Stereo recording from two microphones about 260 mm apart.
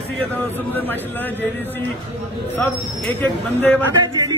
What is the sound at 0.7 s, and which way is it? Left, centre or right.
Speech, centre.